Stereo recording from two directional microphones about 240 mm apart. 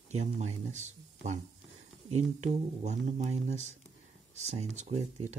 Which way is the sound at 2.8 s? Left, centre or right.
Right.